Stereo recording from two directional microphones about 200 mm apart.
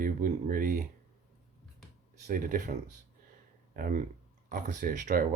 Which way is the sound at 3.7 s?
40° right (ahead or behind).